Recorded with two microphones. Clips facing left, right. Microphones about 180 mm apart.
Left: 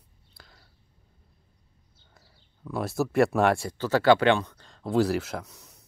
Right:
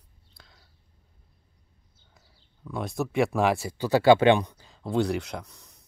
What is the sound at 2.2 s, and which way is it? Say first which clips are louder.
Speech: left 1 dB; centre (ahead or behind).